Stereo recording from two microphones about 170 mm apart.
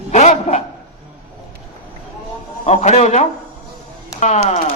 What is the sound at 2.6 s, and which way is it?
Speech, 40° left (ahead or behind).